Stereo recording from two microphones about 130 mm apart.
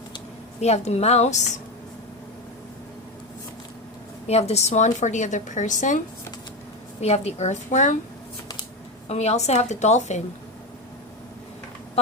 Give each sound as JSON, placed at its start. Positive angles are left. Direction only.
{"t": 0.6, "sound": "a woman's voice", "side_deg": 55}
{"t": 4.3, "sound": "a woman's voice", "side_deg": 55}
{"t": 7.0, "sound": "a woman's voice", "side_deg": 55}
{"t": 9.0, "sound": "a woman's voice", "side_deg": 55}